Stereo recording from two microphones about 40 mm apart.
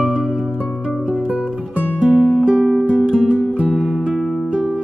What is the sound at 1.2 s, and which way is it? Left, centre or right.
Music, right.